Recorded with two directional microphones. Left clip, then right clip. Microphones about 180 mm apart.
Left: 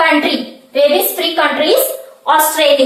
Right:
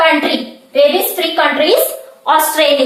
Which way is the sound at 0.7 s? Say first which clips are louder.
Right 1 dB; 20° right (ahead or behind).